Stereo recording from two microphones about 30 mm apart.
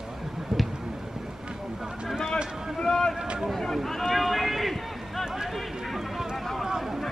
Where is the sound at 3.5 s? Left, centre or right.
Centre.